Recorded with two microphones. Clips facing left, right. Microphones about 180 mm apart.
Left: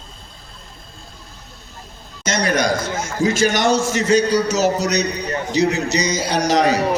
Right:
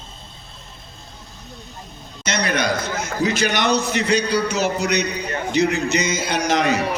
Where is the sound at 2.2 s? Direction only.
45° left (ahead or behind).